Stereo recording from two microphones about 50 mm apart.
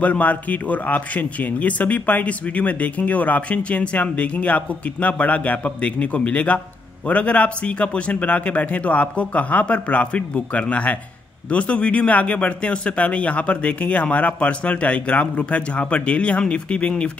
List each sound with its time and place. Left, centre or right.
0.0 s a man's voice: left